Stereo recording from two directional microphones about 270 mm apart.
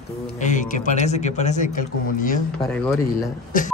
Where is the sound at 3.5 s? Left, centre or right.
Left.